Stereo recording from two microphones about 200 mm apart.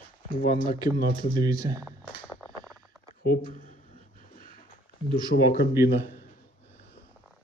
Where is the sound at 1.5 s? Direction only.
15° right (ahead or behind).